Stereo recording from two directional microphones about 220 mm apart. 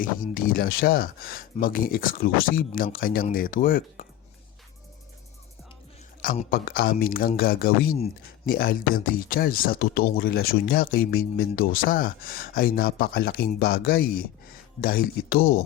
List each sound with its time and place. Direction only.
0.0 s speech: 40° left (ahead or behind)
6.2 s speech: 40° left (ahead or behind)